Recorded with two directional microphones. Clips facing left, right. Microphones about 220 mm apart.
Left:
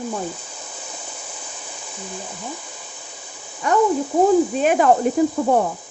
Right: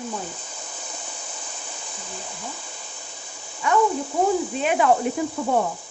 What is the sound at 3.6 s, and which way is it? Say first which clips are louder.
Speech: left 3 dB; 40° left (ahead or behind).